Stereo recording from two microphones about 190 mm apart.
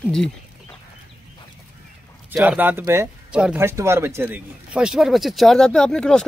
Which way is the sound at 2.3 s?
10° right (ahead or behind).